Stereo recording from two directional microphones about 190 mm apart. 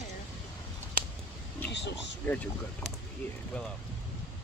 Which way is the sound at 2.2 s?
10° left (ahead or behind).